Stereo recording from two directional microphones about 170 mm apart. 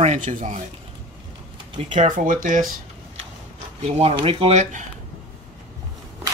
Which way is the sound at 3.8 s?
35° right (ahead or behind).